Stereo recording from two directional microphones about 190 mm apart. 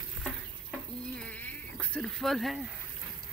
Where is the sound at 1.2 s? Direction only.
10° left (ahead or behind).